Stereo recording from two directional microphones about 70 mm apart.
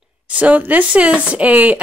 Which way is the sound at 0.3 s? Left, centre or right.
Right.